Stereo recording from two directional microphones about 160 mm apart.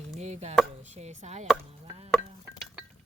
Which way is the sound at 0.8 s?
45° right (ahead or behind).